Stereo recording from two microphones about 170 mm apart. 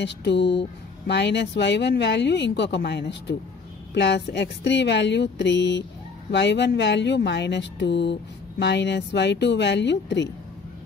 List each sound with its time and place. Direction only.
0.0 s speech: 90° left